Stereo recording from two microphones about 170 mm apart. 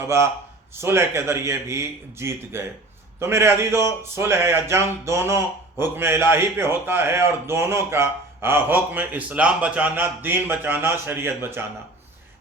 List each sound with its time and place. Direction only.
0.0 s a man's voice: 15° right (ahead or behind)